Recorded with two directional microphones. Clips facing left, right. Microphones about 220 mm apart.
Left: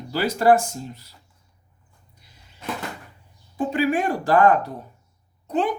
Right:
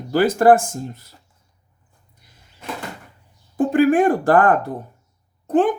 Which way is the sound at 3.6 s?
50° right (ahead or behind).